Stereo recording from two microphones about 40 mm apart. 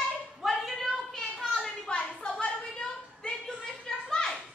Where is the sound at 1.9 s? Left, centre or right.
Left.